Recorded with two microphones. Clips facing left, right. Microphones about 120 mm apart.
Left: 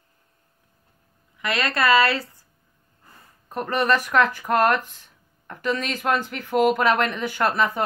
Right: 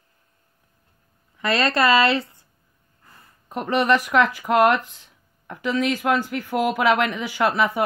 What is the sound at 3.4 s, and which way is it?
Speech, 15° right (ahead or behind).